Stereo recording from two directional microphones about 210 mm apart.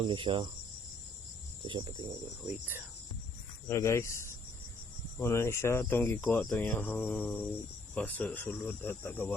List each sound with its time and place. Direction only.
0.0 s cricket: 25° right (ahead or behind)
1.6 s cricket: 25° right (ahead or behind)
3.7 s speech: 15° left (ahead or behind)